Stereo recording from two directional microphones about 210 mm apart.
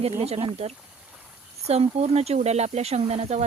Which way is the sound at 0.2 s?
30° right (ahead or behind).